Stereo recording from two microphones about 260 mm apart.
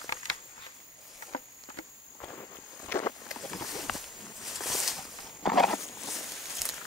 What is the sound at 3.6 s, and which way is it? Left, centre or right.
Walk, centre.